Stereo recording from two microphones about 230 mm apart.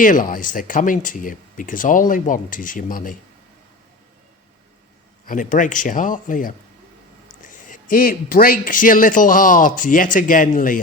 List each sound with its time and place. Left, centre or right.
0.0 s speech: left
5.2 s speech: left
7.7 s speech: left